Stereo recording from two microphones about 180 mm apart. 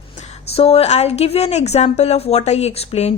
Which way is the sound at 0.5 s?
35° left (ahead or behind).